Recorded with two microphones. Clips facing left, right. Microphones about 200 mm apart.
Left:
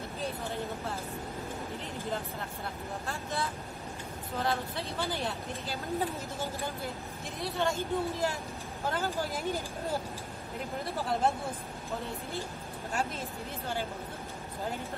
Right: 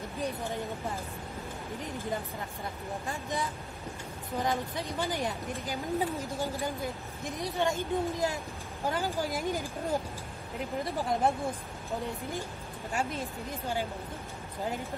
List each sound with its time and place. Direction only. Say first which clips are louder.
3.1 s a woman's voice: right 1 dB; 15° right (ahead or behind)
10.8 s a woman's voice: right 1 dB; 15° right (ahead or behind)
12.9 s a woman's voice: right 2 dB; 15° right (ahead or behind)